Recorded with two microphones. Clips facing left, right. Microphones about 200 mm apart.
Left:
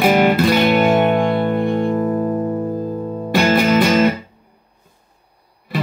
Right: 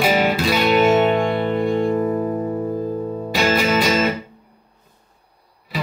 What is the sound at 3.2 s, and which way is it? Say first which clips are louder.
Music: left 5 dB; 55° left (ahead or behind).